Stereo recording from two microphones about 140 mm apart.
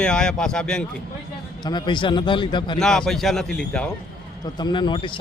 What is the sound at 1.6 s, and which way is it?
A man's voice, 30° left (ahead or behind).